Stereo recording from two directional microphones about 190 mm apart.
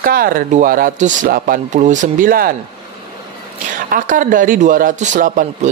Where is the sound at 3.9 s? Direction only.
45° right (ahead or behind).